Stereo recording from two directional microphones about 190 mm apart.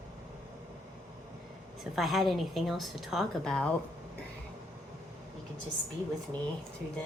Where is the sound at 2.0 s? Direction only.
Centre (ahead or behind).